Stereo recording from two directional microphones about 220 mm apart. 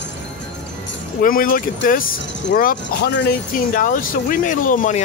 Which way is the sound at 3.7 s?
35° left (ahead or behind).